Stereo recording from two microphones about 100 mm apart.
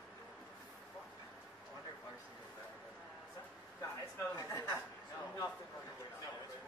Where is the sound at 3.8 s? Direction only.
30° left (ahead or behind).